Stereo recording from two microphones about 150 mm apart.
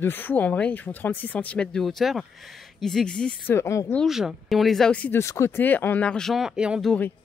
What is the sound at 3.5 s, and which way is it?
Speech, 20° left (ahead or behind).